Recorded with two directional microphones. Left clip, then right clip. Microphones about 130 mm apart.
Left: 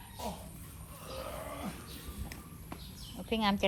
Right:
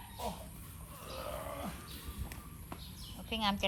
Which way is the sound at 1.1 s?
25° right (ahead or behind).